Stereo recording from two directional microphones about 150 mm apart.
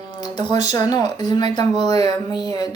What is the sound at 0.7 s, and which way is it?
A woman's voice, 25° left (ahead or behind).